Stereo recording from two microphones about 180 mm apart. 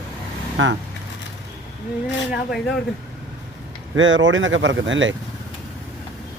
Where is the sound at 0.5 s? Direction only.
90° right.